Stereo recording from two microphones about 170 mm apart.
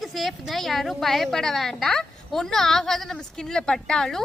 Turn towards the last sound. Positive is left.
turn(degrees=5)  # may be behind; listen again after turning